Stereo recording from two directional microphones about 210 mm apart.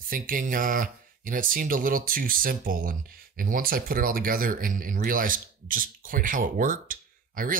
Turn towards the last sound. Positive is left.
turn(degrees=-40)  # may be behind; listen again after turning